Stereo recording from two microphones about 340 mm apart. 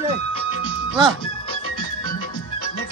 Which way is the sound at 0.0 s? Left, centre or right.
Centre.